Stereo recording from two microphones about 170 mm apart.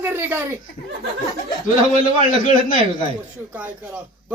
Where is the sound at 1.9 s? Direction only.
50° left (ahead or behind).